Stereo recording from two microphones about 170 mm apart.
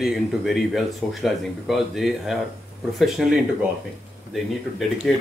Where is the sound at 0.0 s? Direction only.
Centre (ahead or behind).